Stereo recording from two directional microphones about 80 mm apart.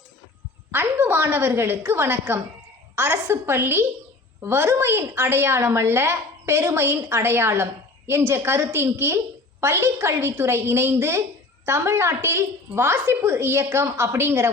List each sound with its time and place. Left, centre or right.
0.7 s a woman's voice: right